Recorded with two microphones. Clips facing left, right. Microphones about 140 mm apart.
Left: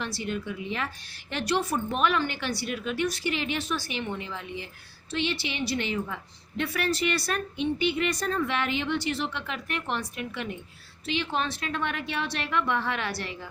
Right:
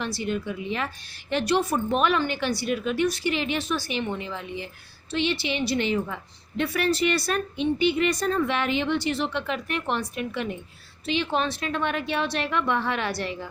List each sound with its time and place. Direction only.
0.0 s a woman's voice: 25° right (ahead or behind)